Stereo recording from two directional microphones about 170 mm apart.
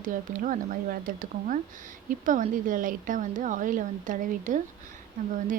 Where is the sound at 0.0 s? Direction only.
50° right (ahead or behind).